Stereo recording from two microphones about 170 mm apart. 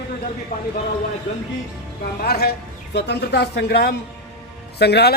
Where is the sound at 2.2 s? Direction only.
65° left (ahead or behind).